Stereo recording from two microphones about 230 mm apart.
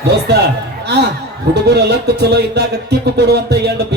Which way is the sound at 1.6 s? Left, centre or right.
Right.